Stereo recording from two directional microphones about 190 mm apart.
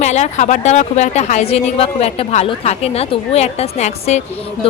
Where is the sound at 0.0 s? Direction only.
35° left (ahead or behind).